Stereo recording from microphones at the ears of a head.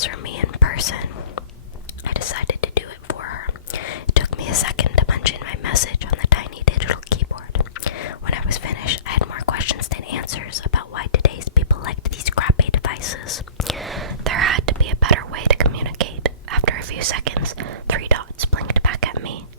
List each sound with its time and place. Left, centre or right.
0.0 s whispering: left
14.0 s whispering: right